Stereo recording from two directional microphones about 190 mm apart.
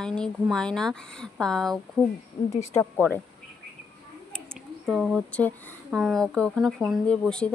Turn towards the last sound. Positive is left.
turn(degrees=5)  # may be behind; listen again after turning